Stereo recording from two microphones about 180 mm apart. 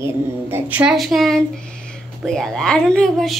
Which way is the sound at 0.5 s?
10° right (ahead or behind).